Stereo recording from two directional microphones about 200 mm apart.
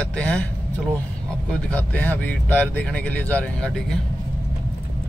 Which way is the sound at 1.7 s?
5° left (ahead or behind).